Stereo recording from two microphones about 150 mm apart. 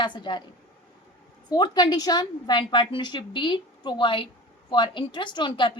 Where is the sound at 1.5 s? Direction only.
30° left (ahead or behind).